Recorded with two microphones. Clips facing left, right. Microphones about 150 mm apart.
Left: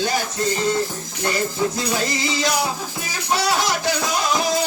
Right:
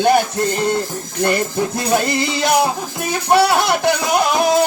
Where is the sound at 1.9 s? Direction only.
55° right (ahead or behind).